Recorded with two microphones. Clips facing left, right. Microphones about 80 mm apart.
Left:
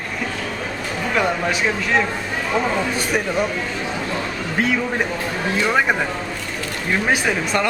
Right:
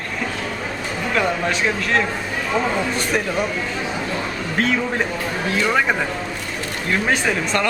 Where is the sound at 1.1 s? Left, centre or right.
Centre.